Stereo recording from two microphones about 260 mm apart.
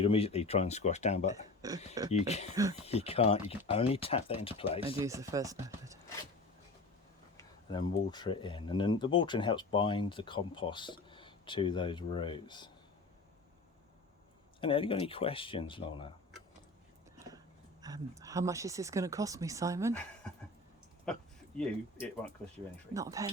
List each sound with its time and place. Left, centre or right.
0.0 s speech: left
1.3 s speech: centre
2.0 s speech: left
4.9 s speech: centre
7.3 s speech: centre
14.6 s speech: left
17.8 s speech: centre
21.1 s speech: centre
23.0 s speech: centre